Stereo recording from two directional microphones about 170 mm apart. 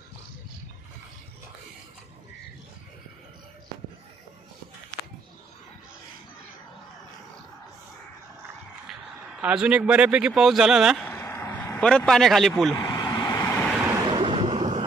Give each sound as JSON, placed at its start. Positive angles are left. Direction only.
{"t": 9.4, "sound": "speech", "side_deg": -5}
{"t": 11.1, "sound": "vehicle", "side_deg": 15}
{"t": 12.7, "sound": "vehicle", "side_deg": 20}
{"t": 13.5, "sound": "vehicle", "side_deg": 10}
{"t": 14.1, "sound": "a sound", "side_deg": -30}